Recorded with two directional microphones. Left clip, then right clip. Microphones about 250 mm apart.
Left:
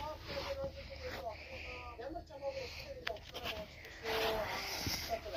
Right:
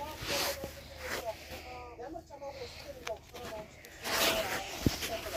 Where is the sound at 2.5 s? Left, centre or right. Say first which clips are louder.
Left 3 dB; centre.